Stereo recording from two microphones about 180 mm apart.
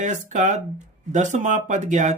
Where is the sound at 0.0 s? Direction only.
45° right (ahead or behind).